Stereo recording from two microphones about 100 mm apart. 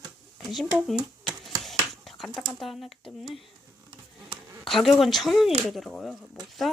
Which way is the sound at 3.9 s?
50° right (ahead or behind).